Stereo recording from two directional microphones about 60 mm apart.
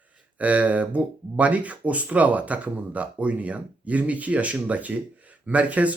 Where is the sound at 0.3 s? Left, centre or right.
Right.